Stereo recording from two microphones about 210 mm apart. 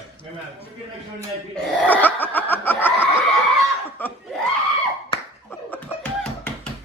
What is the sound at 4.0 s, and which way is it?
Laughter, 10° left (ahead or behind).